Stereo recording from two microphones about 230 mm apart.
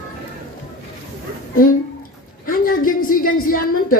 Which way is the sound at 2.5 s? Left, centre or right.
Left.